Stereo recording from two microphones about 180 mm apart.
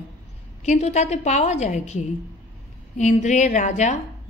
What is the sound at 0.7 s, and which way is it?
Speech, 40° left (ahead or behind).